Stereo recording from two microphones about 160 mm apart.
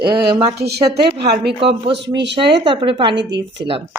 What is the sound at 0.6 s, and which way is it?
Speech, 90° right.